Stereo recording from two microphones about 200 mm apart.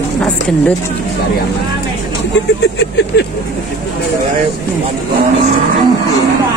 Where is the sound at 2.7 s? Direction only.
60° left (ahead or behind).